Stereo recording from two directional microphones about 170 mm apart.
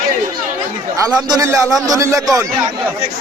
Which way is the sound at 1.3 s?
20° right (ahead or behind).